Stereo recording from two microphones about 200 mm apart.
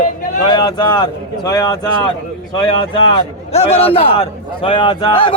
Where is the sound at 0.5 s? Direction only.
20° left (ahead or behind).